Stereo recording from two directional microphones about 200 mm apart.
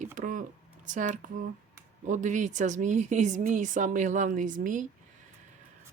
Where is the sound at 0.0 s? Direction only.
40° right (ahead or behind).